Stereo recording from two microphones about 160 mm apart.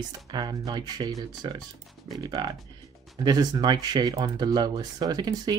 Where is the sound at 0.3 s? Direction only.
25° right (ahead or behind).